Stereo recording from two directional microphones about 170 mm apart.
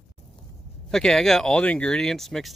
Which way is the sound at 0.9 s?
5° left (ahead or behind).